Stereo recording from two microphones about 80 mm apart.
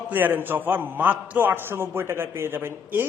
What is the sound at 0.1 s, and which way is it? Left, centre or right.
A man's voice, right.